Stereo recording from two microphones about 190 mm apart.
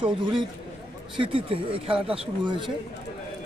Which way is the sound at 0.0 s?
25° right (ahead or behind).